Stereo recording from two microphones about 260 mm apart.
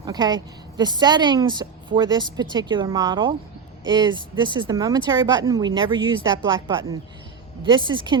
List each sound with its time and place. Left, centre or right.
0.0 s a woman's voice: centre